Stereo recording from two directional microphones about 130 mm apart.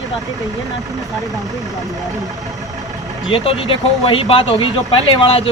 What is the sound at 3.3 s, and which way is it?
Speech, 45° left (ahead or behind).